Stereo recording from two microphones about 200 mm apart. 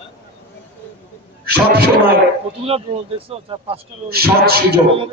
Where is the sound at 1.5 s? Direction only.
50° right (ahead or behind).